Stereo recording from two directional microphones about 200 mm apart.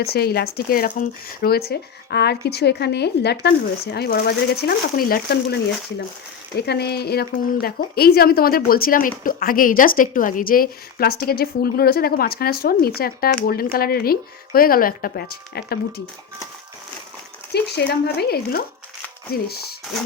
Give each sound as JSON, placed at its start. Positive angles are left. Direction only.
{"t": 0.0, "sound": "a woman's voice", "side_deg": 50}
{"t": 6.6, "sound": "a woman's voice", "side_deg": 55}
{"t": 17.5, "sound": "a woman's voice", "side_deg": 55}